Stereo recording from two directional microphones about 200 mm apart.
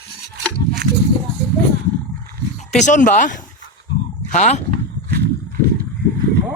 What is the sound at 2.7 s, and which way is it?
Speech, 35° left (ahead or behind).